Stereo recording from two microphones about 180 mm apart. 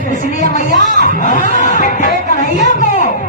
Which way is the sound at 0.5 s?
45° left (ahead or behind).